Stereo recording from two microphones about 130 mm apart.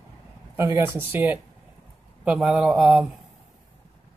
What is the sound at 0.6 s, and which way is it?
A man's voice, 15° right (ahead or behind).